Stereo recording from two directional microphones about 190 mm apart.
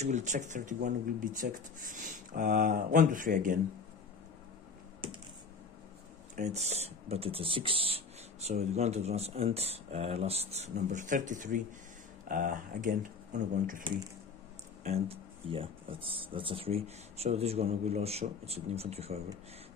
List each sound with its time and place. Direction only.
0.0 s speech: 40° right (ahead or behind)
6.3 s speech: 35° right (ahead or behind)